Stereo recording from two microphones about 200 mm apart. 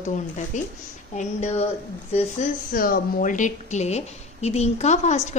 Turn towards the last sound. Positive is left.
turn(degrees=35)  # may be behind; listen again after turning